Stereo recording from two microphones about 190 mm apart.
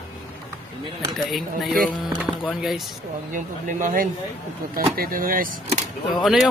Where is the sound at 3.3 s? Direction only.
45° right (ahead or behind).